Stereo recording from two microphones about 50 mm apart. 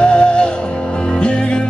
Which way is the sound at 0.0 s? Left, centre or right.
Left.